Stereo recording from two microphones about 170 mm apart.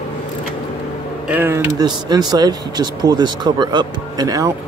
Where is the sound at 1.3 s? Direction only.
15° right (ahead or behind).